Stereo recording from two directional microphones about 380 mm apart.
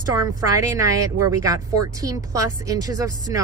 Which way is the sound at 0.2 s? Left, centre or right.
Centre.